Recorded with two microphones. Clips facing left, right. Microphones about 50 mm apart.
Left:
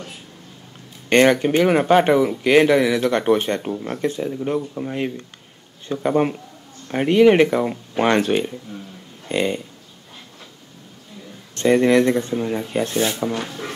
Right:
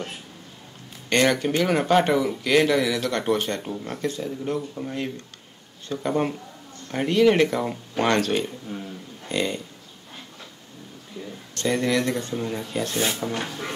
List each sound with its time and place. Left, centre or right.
1.1 s speech: left
11.5 s speech: left
13.1 s speech: centre